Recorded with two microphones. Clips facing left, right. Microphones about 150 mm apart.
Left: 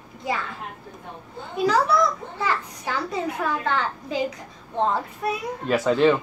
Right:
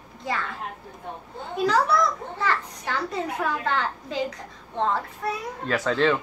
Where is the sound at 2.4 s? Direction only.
10° left (ahead or behind).